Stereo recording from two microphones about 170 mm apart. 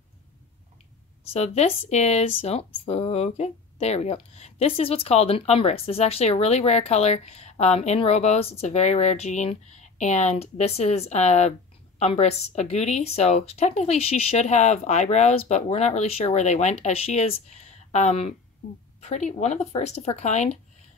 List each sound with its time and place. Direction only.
1.3 s speech: 40° left (ahead or behind)